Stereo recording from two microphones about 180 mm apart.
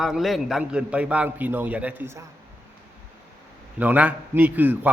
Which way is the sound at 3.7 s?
10° right (ahead or behind).